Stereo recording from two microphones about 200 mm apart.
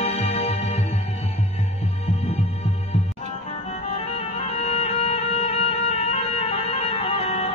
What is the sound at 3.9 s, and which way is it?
Music, 30° left (ahead or behind).